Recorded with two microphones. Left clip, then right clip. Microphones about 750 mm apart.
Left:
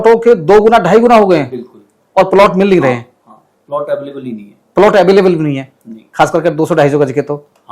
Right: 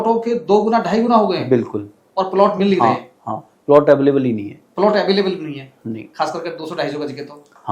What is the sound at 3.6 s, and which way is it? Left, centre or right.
Speech, right.